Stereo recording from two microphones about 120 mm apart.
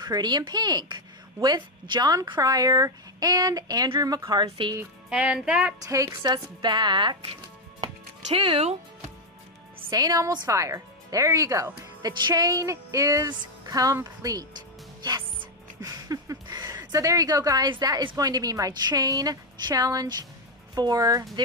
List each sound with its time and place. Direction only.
0.0 s a woman's voice: 35° right (ahead or behind)
5.1 s speech: 10° right (ahead or behind)
5.9 s a woman's voice: 30° right (ahead or behind)
8.3 s speech: 55° right (ahead or behind)
9.8 s speech: 30° right (ahead or behind)
12.1 s music: 35° right (ahead or behind)
13.3 s a woman's voice: 30° right (ahead or behind)